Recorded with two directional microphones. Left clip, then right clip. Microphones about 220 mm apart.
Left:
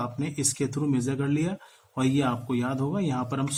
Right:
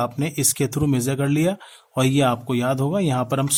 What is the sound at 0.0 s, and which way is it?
Speech, 55° right (ahead or behind).